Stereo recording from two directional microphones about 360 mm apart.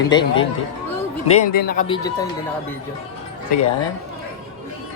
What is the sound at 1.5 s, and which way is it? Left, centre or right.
Speech, left.